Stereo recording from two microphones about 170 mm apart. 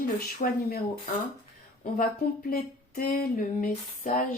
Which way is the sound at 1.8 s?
55° left (ahead or behind).